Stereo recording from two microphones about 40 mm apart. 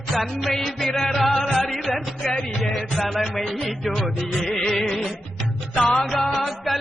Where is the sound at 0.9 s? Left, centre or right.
Centre.